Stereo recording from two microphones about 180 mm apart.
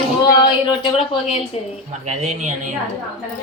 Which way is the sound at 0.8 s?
35° left (ahead or behind).